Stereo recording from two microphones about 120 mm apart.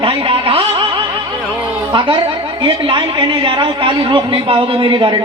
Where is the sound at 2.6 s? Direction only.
40° right (ahead or behind).